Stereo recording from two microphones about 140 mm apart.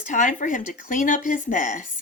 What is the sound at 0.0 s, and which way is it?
Speech, 65° left (ahead or behind).